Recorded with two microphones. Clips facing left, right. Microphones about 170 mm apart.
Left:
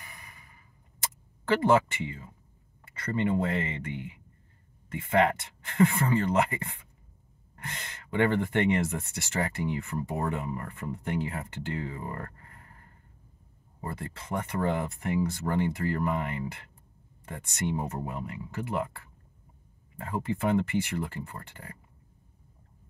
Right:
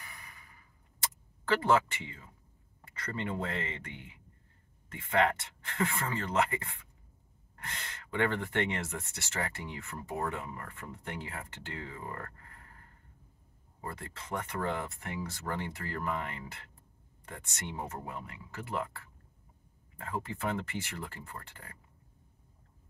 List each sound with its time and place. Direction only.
0.0 s a sound: 15° left (ahead or behind)
1.5 s speech: 10° left (ahead or behind)
14.5 s speech: 15° left (ahead or behind)